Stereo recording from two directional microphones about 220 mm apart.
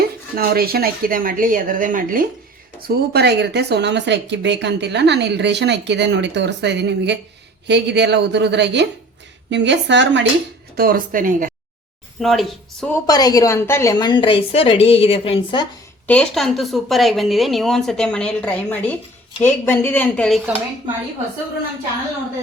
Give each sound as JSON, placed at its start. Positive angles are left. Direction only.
{"t": 0.3, "sound": "speech", "side_deg": -45}
{"t": 10.8, "sound": "speech", "side_deg": -40}
{"t": 12.2, "sound": "a woman's voice", "side_deg": 0}
{"t": 13.1, "sound": "a woman's voice", "side_deg": 15}
{"t": 16.0, "sound": "a woman's voice", "side_deg": 5}